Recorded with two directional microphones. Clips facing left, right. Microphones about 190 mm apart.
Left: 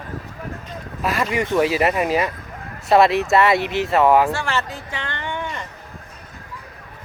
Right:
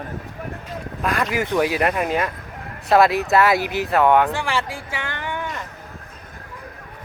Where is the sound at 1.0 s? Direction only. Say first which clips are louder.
Left 1 dB; centre (ahead or behind).